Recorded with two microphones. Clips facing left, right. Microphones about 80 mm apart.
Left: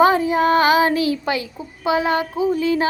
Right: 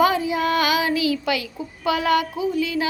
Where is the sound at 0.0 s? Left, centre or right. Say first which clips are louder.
Left 4 dB; left.